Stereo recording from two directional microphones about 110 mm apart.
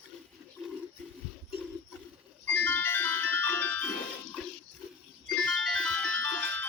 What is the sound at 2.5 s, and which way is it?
Music, 15° left (ahead or behind).